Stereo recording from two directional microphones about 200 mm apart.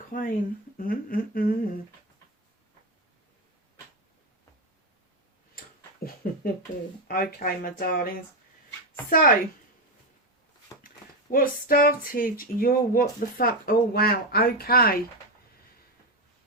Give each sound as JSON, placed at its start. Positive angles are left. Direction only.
{"t": 0.1, "sound": "speech", "side_deg": 45}
{"t": 7.1, "sound": "speech", "side_deg": 45}
{"t": 10.8, "sound": "speech", "side_deg": 45}